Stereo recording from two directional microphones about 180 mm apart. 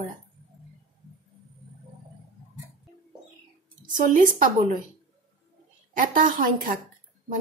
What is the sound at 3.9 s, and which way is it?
Speech, 50° right (ahead or behind).